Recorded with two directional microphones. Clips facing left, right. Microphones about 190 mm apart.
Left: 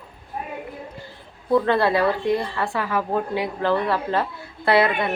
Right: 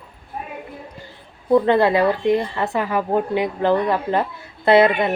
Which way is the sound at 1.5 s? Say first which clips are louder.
Right 4 dB; 20° right (ahead or behind).